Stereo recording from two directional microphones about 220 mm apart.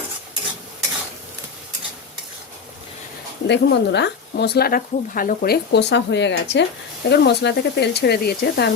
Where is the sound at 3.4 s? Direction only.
50° left (ahead or behind).